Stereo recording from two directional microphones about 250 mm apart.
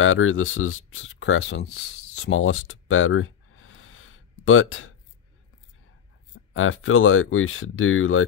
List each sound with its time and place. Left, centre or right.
0.0 s speech: left
6.5 s speech: left